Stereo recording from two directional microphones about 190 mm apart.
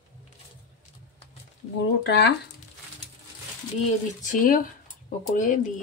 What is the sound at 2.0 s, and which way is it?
Speech, 65° left (ahead or behind).